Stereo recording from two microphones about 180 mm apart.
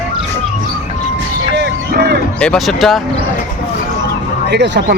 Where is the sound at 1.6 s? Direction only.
65° right (ahead or behind).